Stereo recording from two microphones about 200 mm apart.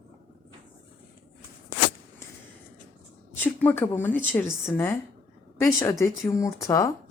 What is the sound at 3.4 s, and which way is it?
Speech, 10° left (ahead or behind).